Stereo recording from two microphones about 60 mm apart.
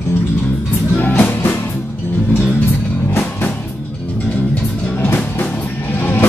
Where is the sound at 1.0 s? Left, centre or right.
Left.